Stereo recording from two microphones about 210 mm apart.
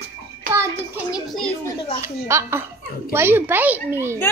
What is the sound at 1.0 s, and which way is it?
Speech, centre (ahead or behind).